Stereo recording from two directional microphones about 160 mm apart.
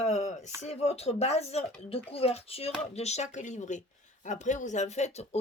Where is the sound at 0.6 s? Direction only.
40° left (ahead or behind).